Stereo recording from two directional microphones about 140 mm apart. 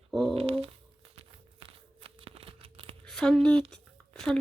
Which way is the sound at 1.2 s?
40° right (ahead or behind).